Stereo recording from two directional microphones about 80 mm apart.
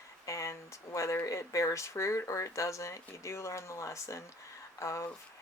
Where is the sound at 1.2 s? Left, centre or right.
Left.